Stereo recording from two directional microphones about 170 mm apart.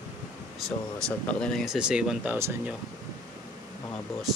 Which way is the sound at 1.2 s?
5° left (ahead or behind).